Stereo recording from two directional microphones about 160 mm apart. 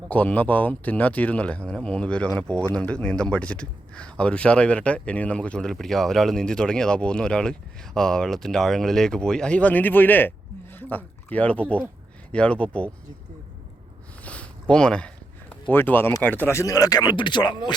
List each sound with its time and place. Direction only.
0.1 s speech: 10° left (ahead or behind)
14.3 s a sound: 10° left (ahead or behind)
16.2 s speech: 10° left (ahead or behind); by 17.7 s 30° left (ahead or behind)